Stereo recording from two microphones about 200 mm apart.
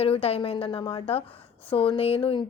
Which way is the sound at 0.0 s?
30° left (ahead or behind).